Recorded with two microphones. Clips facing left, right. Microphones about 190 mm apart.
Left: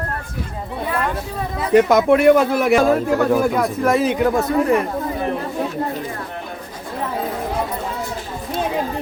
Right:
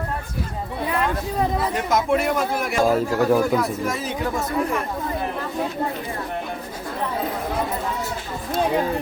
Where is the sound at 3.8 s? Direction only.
65° left (ahead or behind).